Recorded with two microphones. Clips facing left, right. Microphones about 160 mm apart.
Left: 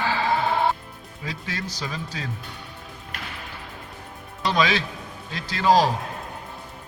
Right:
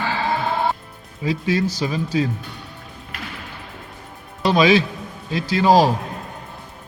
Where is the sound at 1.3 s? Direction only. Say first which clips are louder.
Right 12 dB; 10° right (ahead or behind).